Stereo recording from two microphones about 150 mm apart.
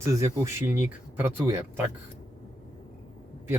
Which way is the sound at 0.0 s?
20° right (ahead or behind).